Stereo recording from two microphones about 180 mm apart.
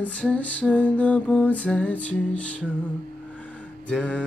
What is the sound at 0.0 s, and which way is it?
Mantra, 5° left (ahead or behind).